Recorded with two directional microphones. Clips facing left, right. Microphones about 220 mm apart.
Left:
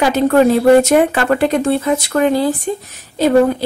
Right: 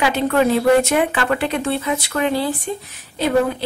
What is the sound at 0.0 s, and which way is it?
A woman's voice, 40° left (ahead or behind).